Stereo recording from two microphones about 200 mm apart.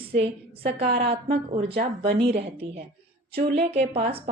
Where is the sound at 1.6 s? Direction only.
50° right (ahead or behind).